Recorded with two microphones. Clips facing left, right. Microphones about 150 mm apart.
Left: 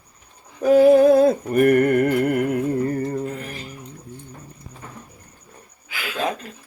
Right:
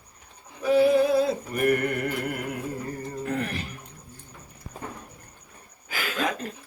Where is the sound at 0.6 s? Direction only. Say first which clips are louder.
Left 7 dB; 45° left (ahead or behind).